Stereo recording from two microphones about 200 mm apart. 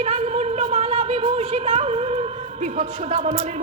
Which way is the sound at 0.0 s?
35° right (ahead or behind).